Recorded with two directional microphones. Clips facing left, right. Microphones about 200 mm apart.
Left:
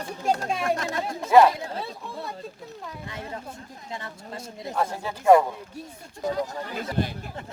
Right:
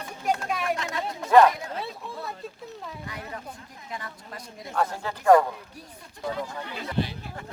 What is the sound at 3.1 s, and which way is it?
Speech, 25° left (ahead or behind).